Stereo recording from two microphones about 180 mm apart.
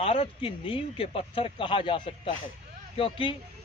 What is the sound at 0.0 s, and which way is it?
A man's voice, 30° left (ahead or behind).